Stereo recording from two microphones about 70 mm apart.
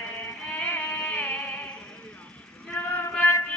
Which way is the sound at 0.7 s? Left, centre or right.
Left.